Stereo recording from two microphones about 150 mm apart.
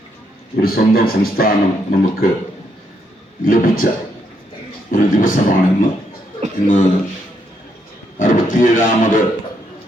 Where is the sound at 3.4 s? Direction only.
70° left (ahead or behind).